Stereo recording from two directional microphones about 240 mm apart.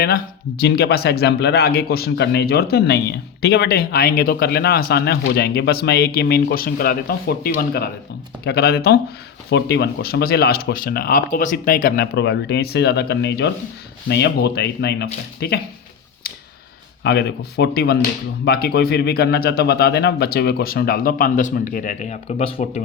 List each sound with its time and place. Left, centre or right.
0.0 s speech: left
17.0 s speech: left